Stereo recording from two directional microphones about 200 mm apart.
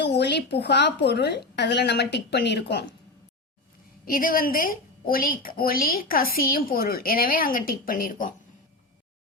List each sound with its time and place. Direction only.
0.0 s a woman's voice: 55° left (ahead or behind)
4.0 s a woman's voice: 45° left (ahead or behind)